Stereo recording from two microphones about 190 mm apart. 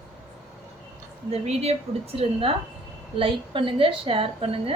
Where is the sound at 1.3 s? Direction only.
35° right (ahead or behind).